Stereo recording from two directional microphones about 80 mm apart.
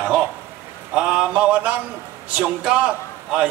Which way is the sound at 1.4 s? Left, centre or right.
Centre.